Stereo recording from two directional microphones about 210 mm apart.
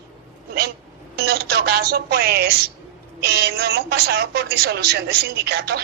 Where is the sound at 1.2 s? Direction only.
50° right (ahead or behind).